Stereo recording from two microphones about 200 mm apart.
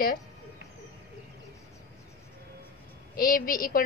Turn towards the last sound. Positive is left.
turn(degrees=45)  # may be behind; listen again after turning